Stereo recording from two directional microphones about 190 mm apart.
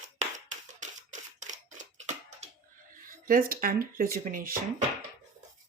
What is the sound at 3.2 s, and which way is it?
Speech, 50° right (ahead or behind).